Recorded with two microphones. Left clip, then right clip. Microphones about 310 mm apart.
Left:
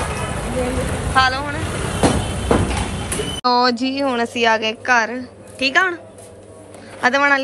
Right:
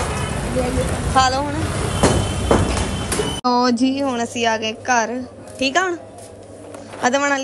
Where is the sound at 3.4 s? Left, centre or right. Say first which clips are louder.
Left 2 dB; centre.